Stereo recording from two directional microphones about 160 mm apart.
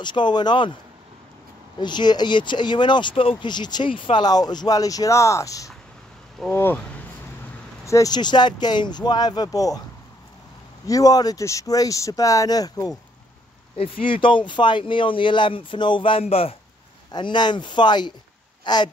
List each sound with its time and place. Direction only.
0.0 s speech: 30° left (ahead or behind)
1.8 s speech: 25° left (ahead or behind)
7.8 s speech: 20° left (ahead or behind)
10.9 s speech: 20° left (ahead or behind)
14.0 s speech: 30° left (ahead or behind)